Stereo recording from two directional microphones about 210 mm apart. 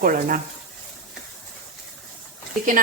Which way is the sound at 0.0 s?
40° right (ahead or behind).